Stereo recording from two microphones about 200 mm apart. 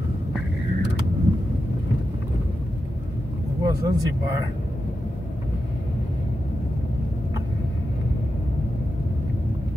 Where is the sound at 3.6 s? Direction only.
15° right (ahead or behind).